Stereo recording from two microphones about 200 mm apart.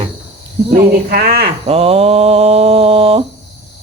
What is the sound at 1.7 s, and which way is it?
Speech, 30° right (ahead or behind).